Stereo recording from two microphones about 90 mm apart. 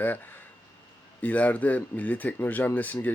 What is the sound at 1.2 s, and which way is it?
Speech, 15° left (ahead or behind).